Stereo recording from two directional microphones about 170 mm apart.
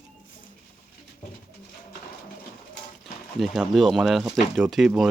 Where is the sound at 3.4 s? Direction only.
Centre (ahead or behind).